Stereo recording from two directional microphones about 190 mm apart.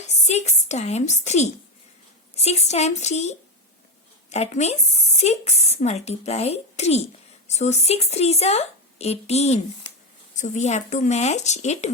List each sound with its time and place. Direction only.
0.1 s speech: 35° left (ahead or behind)